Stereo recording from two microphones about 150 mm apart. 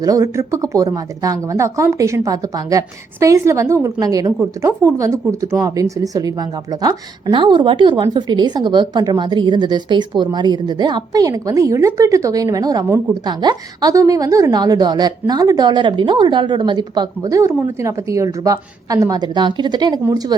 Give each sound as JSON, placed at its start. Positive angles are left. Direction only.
{"t": 0.0, "sound": "speech", "side_deg": -25}